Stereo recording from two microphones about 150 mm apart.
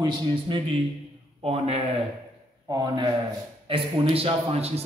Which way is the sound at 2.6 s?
25° right (ahead or behind).